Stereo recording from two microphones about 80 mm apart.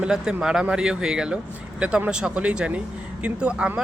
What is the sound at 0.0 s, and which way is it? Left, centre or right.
Speech, centre.